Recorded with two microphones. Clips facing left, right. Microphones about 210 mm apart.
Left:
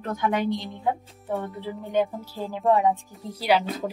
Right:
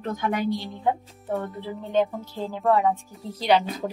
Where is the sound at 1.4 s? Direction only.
15° left (ahead or behind).